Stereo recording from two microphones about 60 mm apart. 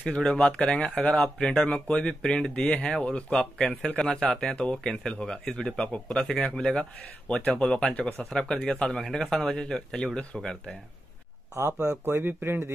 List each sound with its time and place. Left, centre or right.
0.0 s speech: centre
11.5 s speech: right
12.0 s speech: right